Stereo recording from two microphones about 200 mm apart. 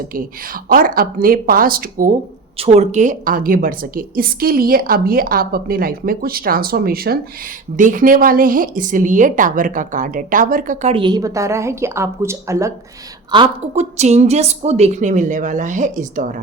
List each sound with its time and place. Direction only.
0.1 s a woman's voice: 45° right (ahead or behind)
2.6 s a woman's voice: 35° right (ahead or behind); by 12.7 s 15° right (ahead or behind)
13.3 s speech: 30° right (ahead or behind)